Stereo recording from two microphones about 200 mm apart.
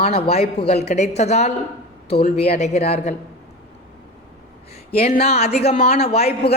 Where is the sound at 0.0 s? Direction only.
30° left (ahead or behind).